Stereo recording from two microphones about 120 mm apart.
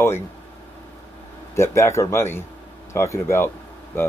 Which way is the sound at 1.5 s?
25° left (ahead or behind).